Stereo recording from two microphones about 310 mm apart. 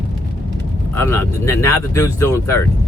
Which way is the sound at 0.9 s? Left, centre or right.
Centre.